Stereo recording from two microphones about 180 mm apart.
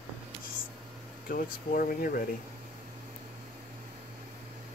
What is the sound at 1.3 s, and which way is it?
Speech, 50° left (ahead or behind).